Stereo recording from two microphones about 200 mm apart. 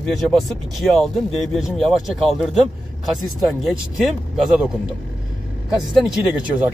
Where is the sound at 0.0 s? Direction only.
Centre (ahead or behind).